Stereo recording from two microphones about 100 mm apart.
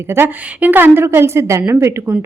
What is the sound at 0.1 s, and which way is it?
Speech, 20° right (ahead or behind).